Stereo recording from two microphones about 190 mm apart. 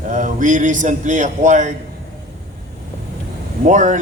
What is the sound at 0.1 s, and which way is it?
A man's voice, 40° right (ahead or behind).